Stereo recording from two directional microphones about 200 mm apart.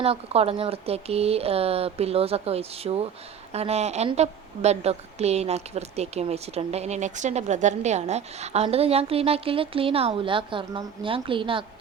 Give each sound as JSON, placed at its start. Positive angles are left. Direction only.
{"t": 0.0, "sound": "a woman's voice", "side_deg": -30}